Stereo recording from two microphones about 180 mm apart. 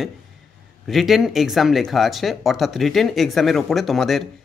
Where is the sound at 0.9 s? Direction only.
Centre (ahead or behind).